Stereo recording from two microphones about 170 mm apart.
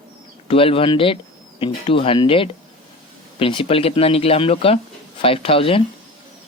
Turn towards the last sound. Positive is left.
turn(degrees=35)  # may be behind; listen again after turning